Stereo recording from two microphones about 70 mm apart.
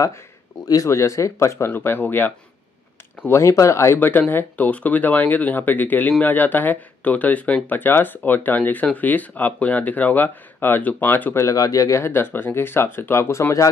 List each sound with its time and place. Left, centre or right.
0.8 s speech: left
1.7 s speech: left
3.3 s speech: left
11.3 s speech: left
12.0 s speech: left